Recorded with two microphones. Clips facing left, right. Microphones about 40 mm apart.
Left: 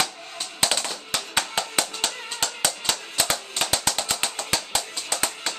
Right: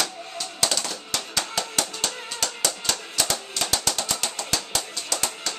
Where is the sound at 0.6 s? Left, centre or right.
Left.